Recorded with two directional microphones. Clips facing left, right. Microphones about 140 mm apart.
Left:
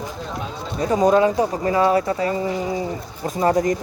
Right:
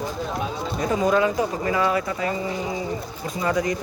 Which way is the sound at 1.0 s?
35° left (ahead or behind).